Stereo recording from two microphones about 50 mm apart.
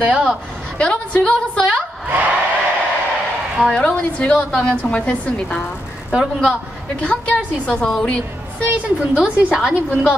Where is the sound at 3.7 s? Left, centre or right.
Left.